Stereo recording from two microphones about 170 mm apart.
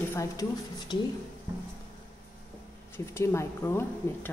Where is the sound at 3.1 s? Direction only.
15° left (ahead or behind).